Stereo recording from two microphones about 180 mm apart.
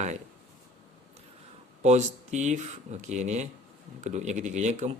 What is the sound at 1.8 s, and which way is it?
Speech, 40° right (ahead or behind).